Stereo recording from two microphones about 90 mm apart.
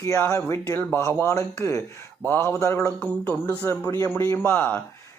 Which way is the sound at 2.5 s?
35° left (ahead or behind).